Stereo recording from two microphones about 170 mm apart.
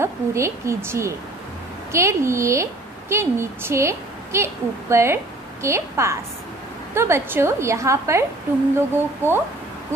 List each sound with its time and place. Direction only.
0.0 s a woman's voice: 15° right (ahead or behind)